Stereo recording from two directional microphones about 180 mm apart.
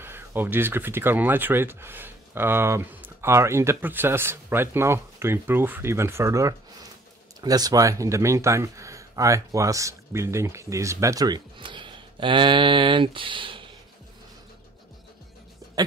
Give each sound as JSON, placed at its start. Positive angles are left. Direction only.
{"t": 0.0, "sound": "speech", "side_deg": -10}